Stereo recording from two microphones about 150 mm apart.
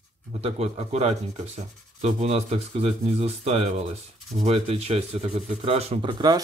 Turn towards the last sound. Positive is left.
turn(degrees=-30)  # may be behind; listen again after turning